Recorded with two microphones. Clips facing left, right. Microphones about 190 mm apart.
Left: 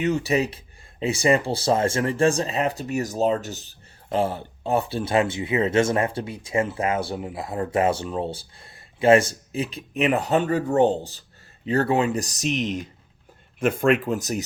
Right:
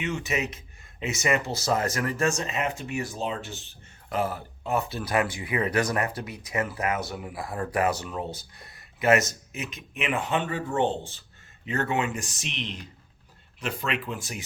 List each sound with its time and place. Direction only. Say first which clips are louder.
0.0 s speech: left 7 dB; 35° left (ahead or behind)